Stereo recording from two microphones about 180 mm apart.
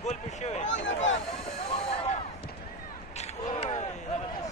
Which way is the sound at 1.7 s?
35° left (ahead or behind).